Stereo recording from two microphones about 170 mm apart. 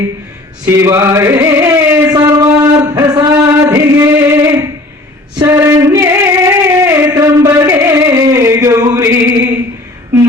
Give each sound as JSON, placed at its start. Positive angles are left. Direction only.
{"t": 0.6, "sound": "chant", "side_deg": -15}
{"t": 3.3, "sound": "music", "side_deg": -15}
{"t": 5.4, "sound": "female singing", "side_deg": -15}